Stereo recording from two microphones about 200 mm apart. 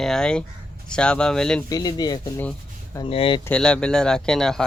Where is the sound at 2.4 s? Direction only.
10° left (ahead or behind).